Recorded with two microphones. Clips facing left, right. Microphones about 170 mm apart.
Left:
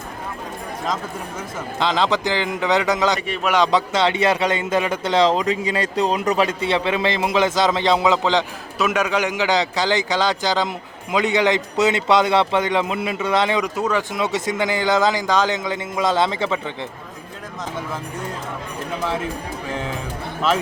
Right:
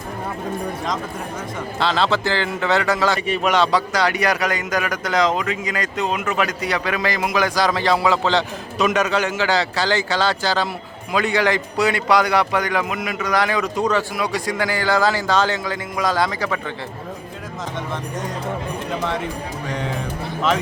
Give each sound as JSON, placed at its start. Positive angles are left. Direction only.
{"t": 1.8, "sound": "speech", "side_deg": 15}
{"t": 3.2, "sound": "a man's voice", "side_deg": 0}
{"t": 3.5, "sound": "speech", "side_deg": 20}
{"t": 13.7, "sound": "a man's voice", "side_deg": 5}
{"t": 14.1, "sound": "speech", "side_deg": 20}